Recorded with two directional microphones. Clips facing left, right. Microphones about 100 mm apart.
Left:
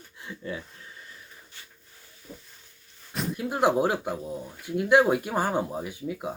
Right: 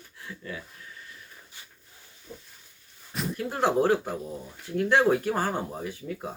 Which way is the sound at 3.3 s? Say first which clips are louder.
Left 1 dB; 15° left (ahead or behind).